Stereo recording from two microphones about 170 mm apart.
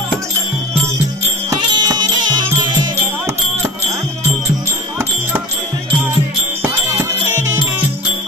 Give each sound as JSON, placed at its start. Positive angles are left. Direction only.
{"t": 1.5, "sound": "music", "side_deg": -25}